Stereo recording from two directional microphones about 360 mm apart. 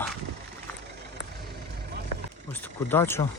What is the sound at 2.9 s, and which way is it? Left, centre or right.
Speech, centre.